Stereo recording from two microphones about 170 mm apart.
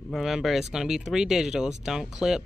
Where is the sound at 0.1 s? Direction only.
Centre (ahead or behind).